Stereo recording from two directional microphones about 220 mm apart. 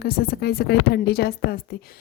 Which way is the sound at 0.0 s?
45° left (ahead or behind).